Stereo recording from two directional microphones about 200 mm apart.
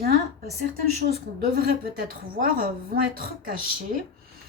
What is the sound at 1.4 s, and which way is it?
Speech, 50° right (ahead or behind).